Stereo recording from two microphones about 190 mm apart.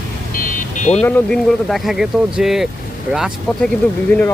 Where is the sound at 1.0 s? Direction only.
5° left (ahead or behind).